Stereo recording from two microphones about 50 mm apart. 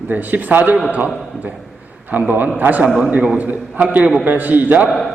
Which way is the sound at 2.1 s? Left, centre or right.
Right.